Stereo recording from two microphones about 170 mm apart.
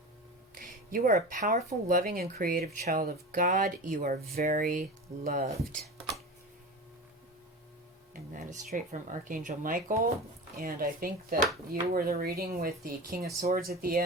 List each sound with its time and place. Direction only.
0.5 s speech: 55° right (ahead or behind)
8.1 s speech: 50° right (ahead or behind)